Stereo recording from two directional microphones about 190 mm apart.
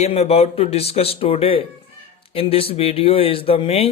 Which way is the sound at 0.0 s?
35° left (ahead or behind).